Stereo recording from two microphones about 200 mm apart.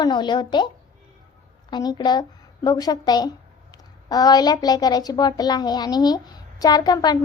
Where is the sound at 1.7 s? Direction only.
20° left (ahead or behind).